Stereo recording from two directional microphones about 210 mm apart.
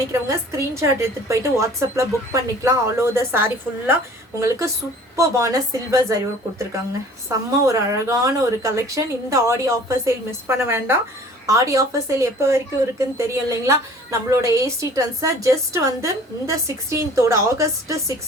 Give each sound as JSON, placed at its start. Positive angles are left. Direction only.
{"t": 0.1, "sound": "a woman's voice", "side_deg": -15}
{"t": 7.7, "sound": "a woman's voice", "side_deg": -15}